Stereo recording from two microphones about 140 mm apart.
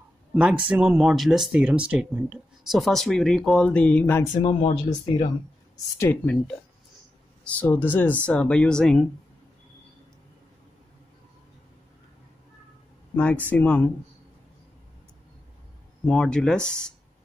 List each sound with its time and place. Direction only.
0.3 s speech: 5° right (ahead or behind); by 4.2 s 10° left (ahead or behind)
4.4 s speech: 35° left (ahead or behind)
5.9 s speech: 10° left (ahead or behind)
7.6 s speech: 15° left (ahead or behind)
13.1 s speech: 10° left (ahead or behind)
16.1 s speech: 5° left (ahead or behind)